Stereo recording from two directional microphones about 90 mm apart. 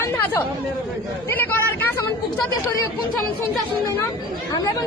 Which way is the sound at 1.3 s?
20° left (ahead or behind).